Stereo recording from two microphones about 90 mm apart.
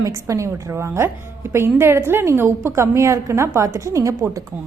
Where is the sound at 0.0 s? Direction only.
40° right (ahead or behind).